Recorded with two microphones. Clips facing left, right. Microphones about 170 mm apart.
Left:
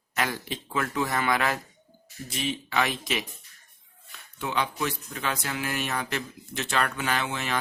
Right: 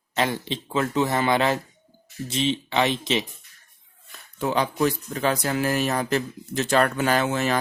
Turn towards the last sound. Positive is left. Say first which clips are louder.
# right 7 dB
turn(degrees=-45)  # may be behind; listen again after turning